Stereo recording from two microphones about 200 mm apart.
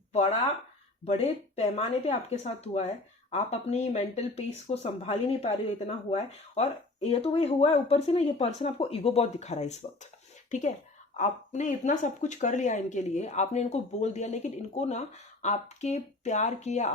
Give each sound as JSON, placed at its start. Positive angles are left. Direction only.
{"t": 1.0, "sound": "speech", "side_deg": 30}